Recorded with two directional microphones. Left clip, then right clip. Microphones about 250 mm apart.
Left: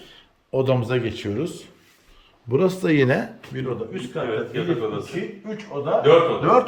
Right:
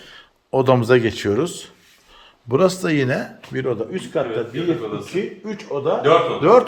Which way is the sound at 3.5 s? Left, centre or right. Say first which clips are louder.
Right 10 dB; right.